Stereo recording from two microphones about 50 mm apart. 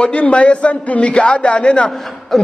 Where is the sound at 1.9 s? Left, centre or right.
Centre.